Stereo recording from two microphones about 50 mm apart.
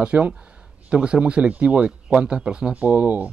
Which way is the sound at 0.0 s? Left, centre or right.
Right.